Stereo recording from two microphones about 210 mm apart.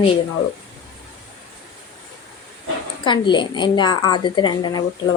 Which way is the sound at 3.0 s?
20° left (ahead or behind).